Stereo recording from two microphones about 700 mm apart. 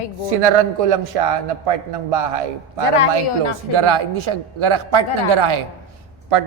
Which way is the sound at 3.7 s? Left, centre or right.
Right.